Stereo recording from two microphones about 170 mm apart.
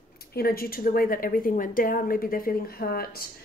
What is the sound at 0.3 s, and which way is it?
A woman's voice, 60° left (ahead or behind).